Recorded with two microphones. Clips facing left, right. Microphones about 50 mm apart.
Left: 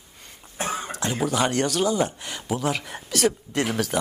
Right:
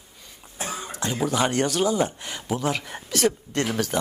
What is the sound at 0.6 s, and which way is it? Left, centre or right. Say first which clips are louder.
Cough: left 4 dB; left.